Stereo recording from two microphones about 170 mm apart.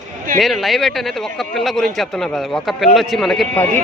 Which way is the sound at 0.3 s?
Centre (ahead or behind).